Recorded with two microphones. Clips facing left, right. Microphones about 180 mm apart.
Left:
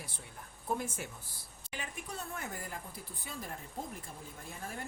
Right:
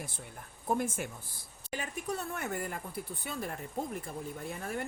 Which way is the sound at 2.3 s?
65° right (ahead or behind).